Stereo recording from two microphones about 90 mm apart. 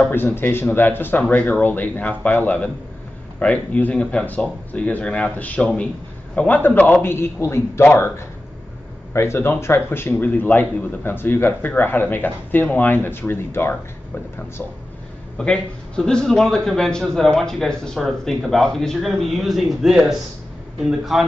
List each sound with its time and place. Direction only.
0.0 s a man's voice: 25° left (ahead or behind)
9.1 s a man's voice: 30° left (ahead or behind)
15.3 s a man's voice: 10° left (ahead or behind)